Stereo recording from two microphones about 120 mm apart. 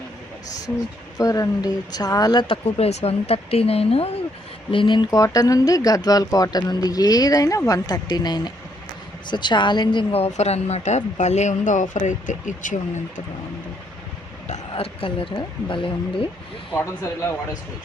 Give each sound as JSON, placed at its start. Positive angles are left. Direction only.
{"t": 1.2, "sound": "speech", "side_deg": 30}
{"t": 2.6, "sound": "speech", "side_deg": 60}
{"t": 4.7, "sound": "speech", "side_deg": 45}
{"t": 5.1, "sound": "a woman's voice", "side_deg": 30}
{"t": 14.4, "sound": "vehicle", "side_deg": 70}
{"t": 15.0, "sound": "speech", "side_deg": 45}
{"t": 16.7, "sound": "speech", "side_deg": 20}